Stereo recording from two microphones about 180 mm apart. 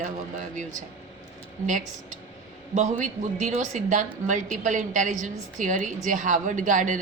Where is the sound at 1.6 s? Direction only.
45° right (ahead or behind).